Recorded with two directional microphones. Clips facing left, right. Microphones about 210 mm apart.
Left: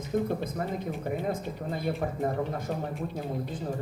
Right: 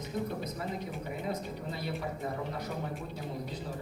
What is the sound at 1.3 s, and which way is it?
Speech, 50° left (ahead or behind).